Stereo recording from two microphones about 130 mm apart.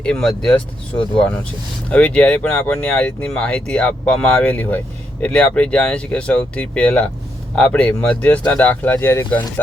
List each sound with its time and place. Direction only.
0.0 s speech: 5° left (ahead or behind)